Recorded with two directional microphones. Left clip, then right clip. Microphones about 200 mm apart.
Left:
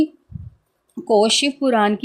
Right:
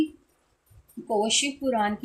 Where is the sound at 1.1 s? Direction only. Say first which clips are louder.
Left 9 dB; 50° left (ahead or behind).